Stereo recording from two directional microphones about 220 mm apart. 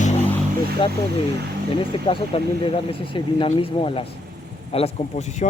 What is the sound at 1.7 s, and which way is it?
Speech, 25° left (ahead or behind).